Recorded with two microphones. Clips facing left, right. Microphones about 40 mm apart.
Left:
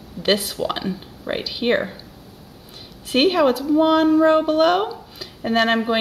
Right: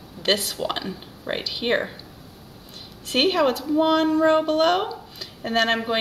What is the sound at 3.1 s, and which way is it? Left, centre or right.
Speech, centre.